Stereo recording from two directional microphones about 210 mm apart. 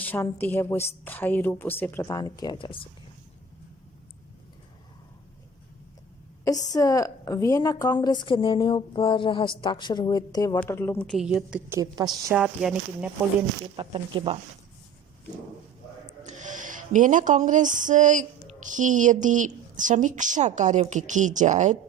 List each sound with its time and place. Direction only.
0.0 s speech: 10° left (ahead or behind)
6.7 s a woman's voice: 15° left (ahead or behind); by 11.8 s 5° right (ahead or behind)
11.8 s a woman's voice: 20° right (ahead or behind)
12.3 s a woman's voice: 5° right (ahead or behind)
13.7 s speech: 25° right (ahead or behind)
16.2 s speech: 35° right (ahead or behind)